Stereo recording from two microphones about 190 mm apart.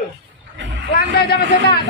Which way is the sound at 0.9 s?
55° left (ahead or behind).